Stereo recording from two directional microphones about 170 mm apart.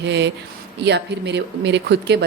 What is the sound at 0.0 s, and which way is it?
Speech, 90° right.